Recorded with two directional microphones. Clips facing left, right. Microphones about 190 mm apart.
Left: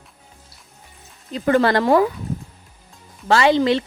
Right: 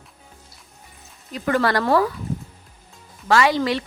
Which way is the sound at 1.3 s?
25° left (ahead or behind).